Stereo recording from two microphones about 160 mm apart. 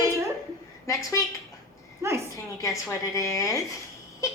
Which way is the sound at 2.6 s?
20° left (ahead or behind).